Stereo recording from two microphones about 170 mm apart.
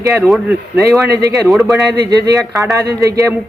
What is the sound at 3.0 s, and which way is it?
Speech, 20° right (ahead or behind).